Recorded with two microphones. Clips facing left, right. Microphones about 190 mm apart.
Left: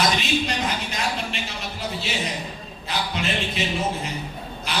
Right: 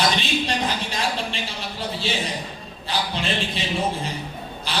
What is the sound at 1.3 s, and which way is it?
Speech, 30° right (ahead or behind).